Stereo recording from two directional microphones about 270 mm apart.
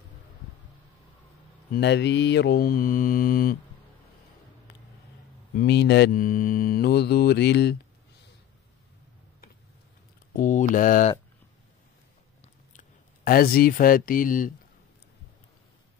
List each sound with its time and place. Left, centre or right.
1.7 s mantra: left
5.5 s mantra: left
10.3 s speech: left
12.7 s speech: left